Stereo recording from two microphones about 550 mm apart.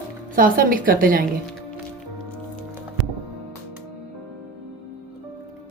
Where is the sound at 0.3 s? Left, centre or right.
Centre.